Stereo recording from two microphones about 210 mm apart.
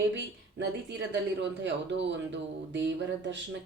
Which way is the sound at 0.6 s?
55° right (ahead or behind).